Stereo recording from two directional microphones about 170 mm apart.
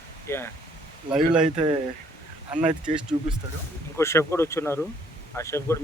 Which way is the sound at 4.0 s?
15° left (ahead or behind).